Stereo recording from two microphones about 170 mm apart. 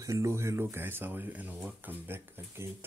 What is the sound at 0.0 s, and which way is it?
Speech, 15° right (ahead or behind).